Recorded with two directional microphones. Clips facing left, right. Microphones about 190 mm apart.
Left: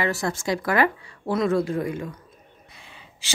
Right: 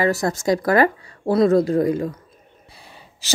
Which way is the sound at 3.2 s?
40° right (ahead or behind).